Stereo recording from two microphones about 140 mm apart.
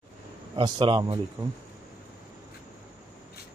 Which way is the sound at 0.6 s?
35° right (ahead or behind).